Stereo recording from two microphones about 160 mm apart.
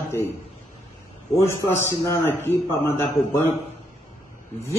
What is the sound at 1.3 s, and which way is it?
A man's voice, 15° left (ahead or behind).